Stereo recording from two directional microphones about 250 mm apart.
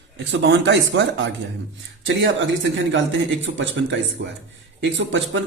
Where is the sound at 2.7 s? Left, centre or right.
Right.